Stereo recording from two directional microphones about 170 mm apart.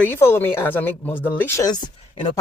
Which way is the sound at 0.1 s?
15° left (ahead or behind).